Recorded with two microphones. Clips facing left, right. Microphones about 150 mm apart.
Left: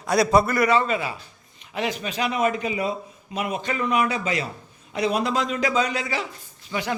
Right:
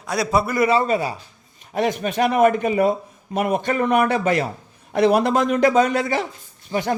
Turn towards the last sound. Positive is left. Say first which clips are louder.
# right 5 dB
turn(degrees=-45)  # may be behind; listen again after turning